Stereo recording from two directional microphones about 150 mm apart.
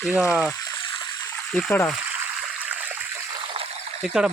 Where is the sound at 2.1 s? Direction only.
5° right (ahead or behind).